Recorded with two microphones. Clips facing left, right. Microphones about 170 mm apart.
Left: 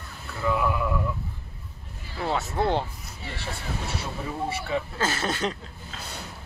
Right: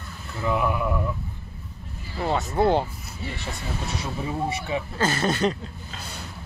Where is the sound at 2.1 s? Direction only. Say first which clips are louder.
Right 3 dB; centre (ahead or behind).